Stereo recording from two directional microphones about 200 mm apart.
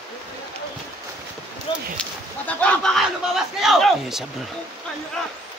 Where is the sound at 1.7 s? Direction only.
25° left (ahead or behind).